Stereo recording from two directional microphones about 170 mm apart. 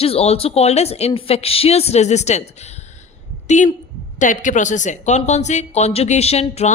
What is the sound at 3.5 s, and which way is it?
A woman's voice, 45° left (ahead or behind).